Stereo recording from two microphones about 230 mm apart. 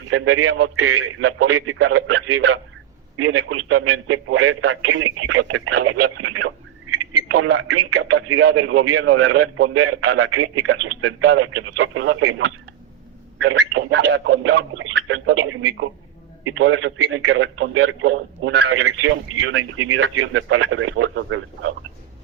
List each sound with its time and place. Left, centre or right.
0.1 s speech: right
7.2 s speech: right
13.4 s speech: right